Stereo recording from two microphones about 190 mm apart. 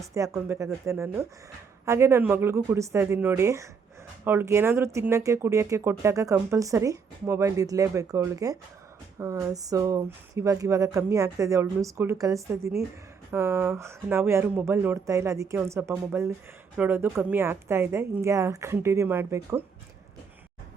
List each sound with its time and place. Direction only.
0.0 s speech: 15° right (ahead or behind)